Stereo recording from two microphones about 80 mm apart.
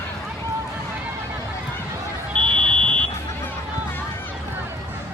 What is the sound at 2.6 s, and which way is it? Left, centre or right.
Buzzer, centre.